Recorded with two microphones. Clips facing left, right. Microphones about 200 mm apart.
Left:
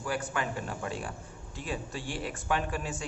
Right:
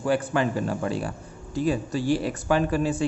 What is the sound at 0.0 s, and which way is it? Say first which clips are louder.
Speech: right 10 dB; 30° right (ahead or behind).